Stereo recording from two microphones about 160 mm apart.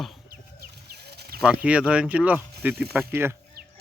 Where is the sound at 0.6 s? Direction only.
85° right.